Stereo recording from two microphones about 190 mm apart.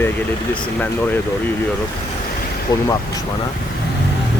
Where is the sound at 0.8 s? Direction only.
10° left (ahead or behind).